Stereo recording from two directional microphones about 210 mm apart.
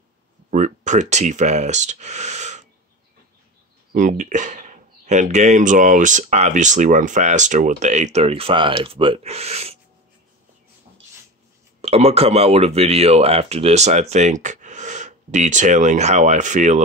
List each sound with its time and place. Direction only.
0.5 s speech: 35° right (ahead or behind)
3.9 s speech: 35° right (ahead or behind)
11.8 s speech: 30° right (ahead or behind)